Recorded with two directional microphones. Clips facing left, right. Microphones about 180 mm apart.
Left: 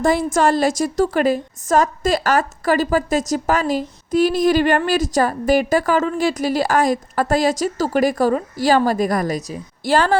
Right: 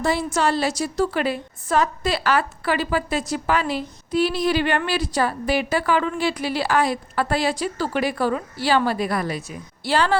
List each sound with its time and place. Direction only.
0.0 s a woman's voice: 50° left (ahead or behind)